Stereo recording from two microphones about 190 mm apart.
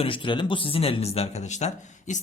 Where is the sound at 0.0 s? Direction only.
25° left (ahead or behind).